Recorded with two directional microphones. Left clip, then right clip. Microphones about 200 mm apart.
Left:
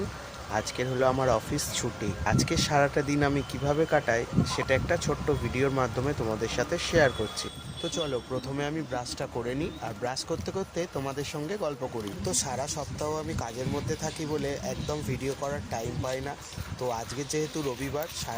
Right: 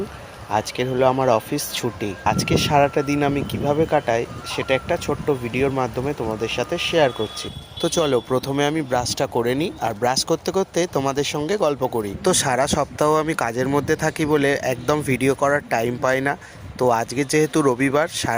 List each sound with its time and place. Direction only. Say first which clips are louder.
0.5 s speech: right 8 dB; 25° right (ahead or behind)
7.8 s speech: right 12 dB; 35° right (ahead or behind)